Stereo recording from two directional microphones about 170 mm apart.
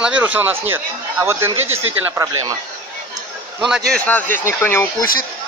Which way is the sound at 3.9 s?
10° left (ahead or behind).